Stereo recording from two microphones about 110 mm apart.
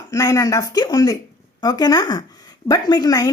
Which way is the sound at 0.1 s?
30° left (ahead or behind).